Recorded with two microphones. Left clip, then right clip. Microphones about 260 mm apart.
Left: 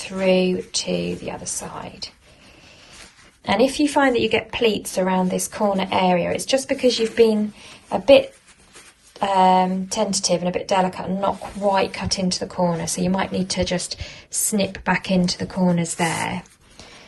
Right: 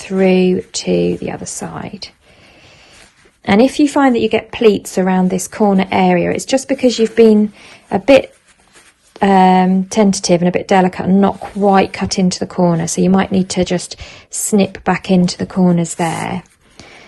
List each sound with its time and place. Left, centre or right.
0.0 s a woman's voice: right
3.4 s a woman's voice: right
9.1 s a woman's voice: right